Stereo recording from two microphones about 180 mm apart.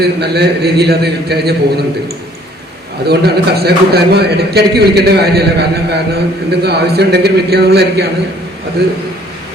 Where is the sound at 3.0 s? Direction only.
60° right (ahead or behind).